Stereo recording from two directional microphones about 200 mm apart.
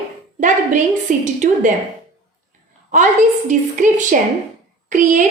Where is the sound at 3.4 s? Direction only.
40° right (ahead or behind).